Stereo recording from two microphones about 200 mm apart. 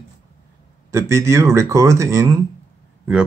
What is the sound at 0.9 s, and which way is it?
Speech, 15° right (ahead or behind).